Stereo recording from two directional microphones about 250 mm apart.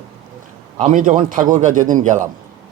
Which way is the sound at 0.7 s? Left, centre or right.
Right.